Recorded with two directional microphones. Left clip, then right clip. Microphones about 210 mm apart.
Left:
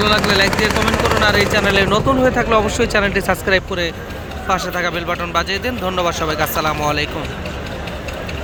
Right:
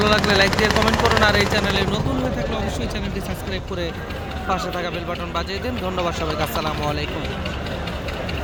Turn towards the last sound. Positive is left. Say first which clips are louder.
# left 6 dB
turn(degrees=5)  # may be behind; listen again after turning